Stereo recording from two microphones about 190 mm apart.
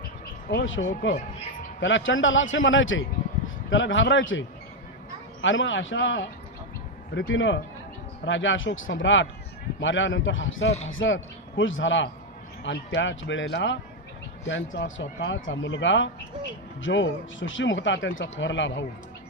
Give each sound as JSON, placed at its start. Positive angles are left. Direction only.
{"t": 0.4, "sound": "speech", "side_deg": 75}